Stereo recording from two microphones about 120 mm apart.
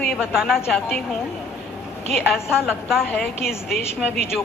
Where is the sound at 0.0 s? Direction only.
Centre (ahead or behind).